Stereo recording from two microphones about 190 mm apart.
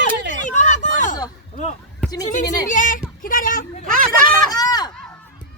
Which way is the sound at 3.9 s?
45° right (ahead or behind).